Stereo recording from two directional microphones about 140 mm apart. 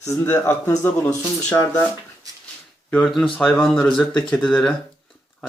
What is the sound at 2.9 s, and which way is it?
Speech, 5° left (ahead or behind).